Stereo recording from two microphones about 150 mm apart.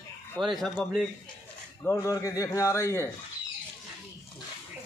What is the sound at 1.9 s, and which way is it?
Speech, 20° left (ahead or behind).